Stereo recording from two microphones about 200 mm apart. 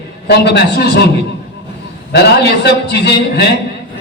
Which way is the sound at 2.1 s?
55° left (ahead or behind).